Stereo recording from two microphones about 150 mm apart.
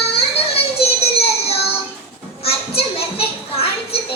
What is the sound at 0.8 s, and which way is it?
Music, 40° left (ahead or behind).